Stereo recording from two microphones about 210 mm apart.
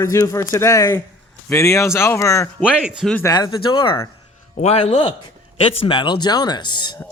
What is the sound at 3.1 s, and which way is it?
Speech, 15° left (ahead or behind).